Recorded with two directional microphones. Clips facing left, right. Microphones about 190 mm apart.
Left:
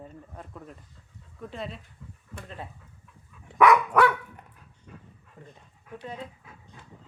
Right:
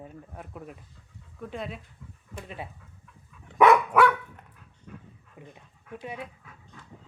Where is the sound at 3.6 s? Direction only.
25° right (ahead or behind).